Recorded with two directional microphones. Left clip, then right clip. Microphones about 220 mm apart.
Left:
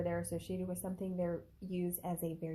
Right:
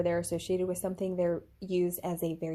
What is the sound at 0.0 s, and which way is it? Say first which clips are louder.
Speech: right 8 dB; 35° right (ahead or behind).